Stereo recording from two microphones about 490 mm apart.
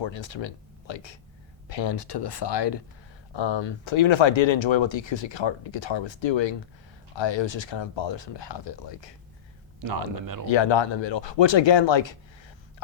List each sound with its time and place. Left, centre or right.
0.0 s speech: left
9.8 s speech: right
10.4 s speech: left